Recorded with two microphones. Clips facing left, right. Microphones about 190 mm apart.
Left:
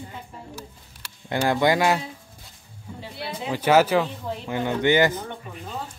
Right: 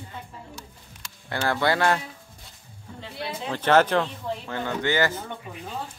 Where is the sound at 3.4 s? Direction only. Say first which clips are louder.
Left 2 dB; 10° left (ahead or behind).